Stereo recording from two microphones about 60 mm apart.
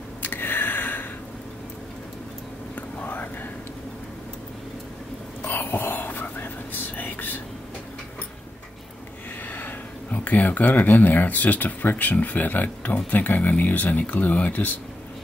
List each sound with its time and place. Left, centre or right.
0.2 s a sound: left
2.7 s whispering: left
5.4 s whispering: left
9.5 s speech: left